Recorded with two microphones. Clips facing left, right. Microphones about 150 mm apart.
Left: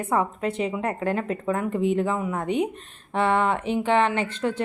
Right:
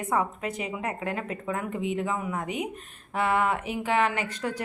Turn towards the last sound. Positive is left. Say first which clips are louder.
# left 5 dB
turn(degrees=30)  # may be behind; listen again after turning